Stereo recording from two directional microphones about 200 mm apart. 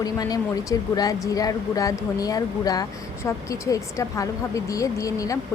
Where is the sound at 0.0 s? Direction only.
20° left (ahead or behind).